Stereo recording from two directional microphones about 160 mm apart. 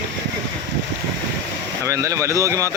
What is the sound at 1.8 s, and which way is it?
Speech, 20° right (ahead or behind).